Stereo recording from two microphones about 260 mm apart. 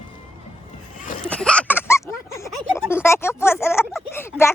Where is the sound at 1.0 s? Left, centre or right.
Left.